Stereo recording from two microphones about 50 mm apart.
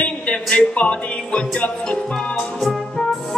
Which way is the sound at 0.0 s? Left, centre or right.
Left.